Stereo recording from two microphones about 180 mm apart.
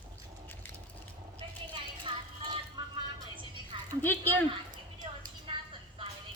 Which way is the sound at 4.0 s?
10° left (ahead or behind).